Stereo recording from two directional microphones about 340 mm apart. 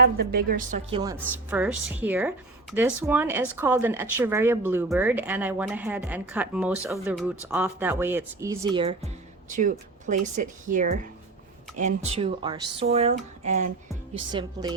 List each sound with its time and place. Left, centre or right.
0.0 s a woman's voice: right